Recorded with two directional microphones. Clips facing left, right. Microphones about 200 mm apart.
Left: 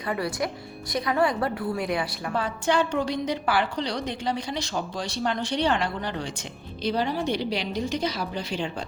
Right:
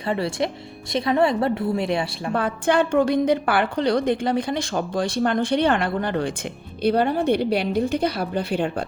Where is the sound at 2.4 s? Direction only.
55° right (ahead or behind).